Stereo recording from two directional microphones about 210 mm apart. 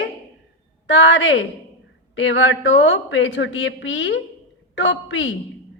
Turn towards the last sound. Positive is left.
turn(degrees=60)  # may be behind; listen again after turning